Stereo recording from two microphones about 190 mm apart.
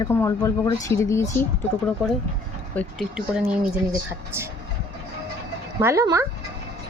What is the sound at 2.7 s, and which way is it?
Speech, 5° left (ahead or behind).